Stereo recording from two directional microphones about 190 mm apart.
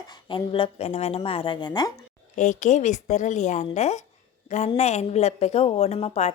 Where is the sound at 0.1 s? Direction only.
25° left (ahead or behind).